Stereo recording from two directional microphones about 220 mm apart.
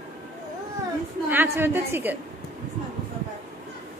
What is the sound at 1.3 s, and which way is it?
Speech, 10° right (ahead or behind).